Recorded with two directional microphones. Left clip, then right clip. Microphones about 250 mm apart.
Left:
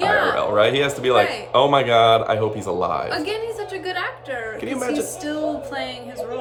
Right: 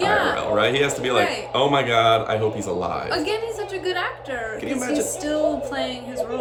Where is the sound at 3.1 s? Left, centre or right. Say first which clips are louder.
Right 1 dB; centre.